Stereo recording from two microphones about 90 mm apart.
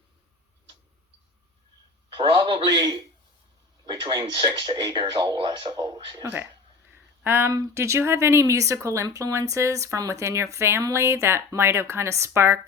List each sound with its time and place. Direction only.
2.1 s a man's voice: 65° right (ahead or behind)
6.9 s a woman's voice: 25° right (ahead or behind)